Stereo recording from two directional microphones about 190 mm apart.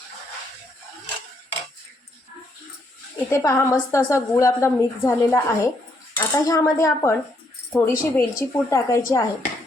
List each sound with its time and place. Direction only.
3.2 s a woman's voice: 15° left (ahead or behind)